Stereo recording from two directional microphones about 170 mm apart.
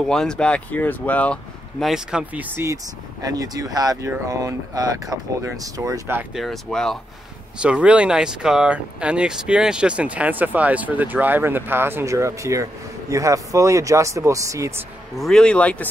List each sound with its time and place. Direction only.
0.1 s speech: 5° left (ahead or behind); by 6.2 s 15° right (ahead or behind)
6.3 s speech: centre (ahead or behind); by 14.9 s 20° right (ahead or behind)
15.1 s a man's voice: 5° left (ahead or behind)